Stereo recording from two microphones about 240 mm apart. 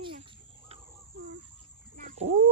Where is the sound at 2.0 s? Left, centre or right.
Right.